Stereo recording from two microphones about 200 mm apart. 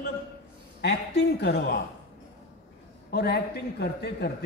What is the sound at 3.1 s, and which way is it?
A man's voice, 55° left (ahead or behind).